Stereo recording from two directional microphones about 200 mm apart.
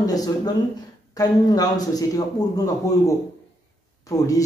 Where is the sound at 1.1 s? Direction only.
20° left (ahead or behind).